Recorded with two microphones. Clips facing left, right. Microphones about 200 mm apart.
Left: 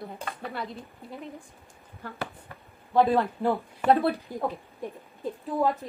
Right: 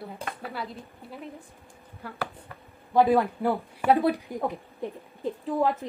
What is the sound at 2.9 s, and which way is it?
Speech, 15° right (ahead or behind).